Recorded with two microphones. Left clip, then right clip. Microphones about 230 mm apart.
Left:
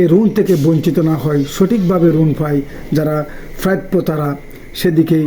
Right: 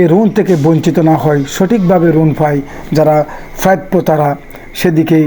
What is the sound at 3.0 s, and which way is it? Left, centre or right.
Speech, right.